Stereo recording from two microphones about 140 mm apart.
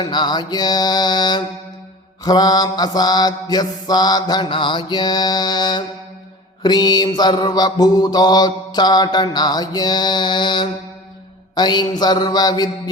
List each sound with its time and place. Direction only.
0.0 s mantra: 30° left (ahead or behind)